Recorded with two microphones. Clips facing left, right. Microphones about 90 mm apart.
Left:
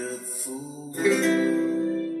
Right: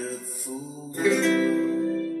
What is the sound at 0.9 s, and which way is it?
Music, centre (ahead or behind).